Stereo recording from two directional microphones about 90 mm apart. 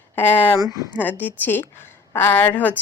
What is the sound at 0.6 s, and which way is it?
Speech, 35° right (ahead or behind).